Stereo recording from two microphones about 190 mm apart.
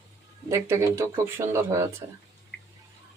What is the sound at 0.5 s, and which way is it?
Speech, 15° right (ahead or behind).